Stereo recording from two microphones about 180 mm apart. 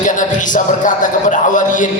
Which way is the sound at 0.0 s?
45° left (ahead or behind).